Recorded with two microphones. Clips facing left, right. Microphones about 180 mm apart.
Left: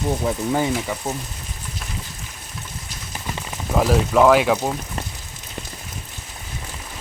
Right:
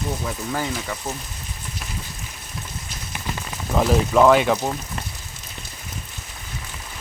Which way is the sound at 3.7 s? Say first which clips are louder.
Left 1 dB; 5° left (ahead or behind).